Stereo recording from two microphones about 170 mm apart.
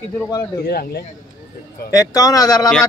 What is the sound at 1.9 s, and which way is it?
Speech, 20° left (ahead or behind).